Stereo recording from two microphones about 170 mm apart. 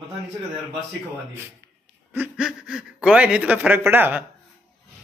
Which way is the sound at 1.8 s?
5° right (ahead or behind).